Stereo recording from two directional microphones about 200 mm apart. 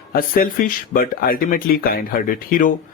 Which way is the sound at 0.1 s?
45° left (ahead or behind).